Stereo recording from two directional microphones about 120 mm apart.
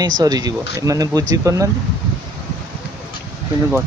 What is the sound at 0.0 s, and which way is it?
Speech, 30° right (ahead or behind).